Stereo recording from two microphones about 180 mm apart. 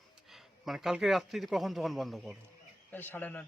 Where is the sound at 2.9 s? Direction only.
10° left (ahead or behind).